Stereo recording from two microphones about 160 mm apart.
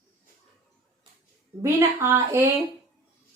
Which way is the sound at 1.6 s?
15° right (ahead or behind).